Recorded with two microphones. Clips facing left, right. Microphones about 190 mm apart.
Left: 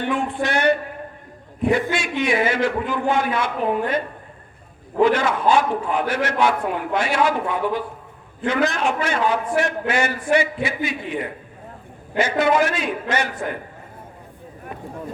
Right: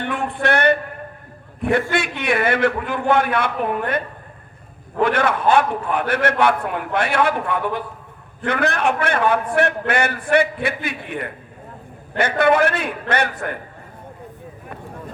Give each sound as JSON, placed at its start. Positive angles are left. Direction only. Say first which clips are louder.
{"t": 0.0, "sound": "a man's voice", "louder": "even", "side_deg": -60}
{"t": 1.9, "sound": "a man's voice", "louder": "even", "side_deg": -60}